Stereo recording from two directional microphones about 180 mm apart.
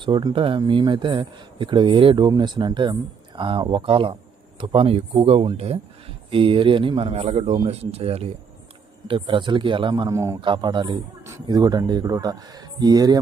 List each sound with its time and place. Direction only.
0.0 s speech: 25° right (ahead or behind)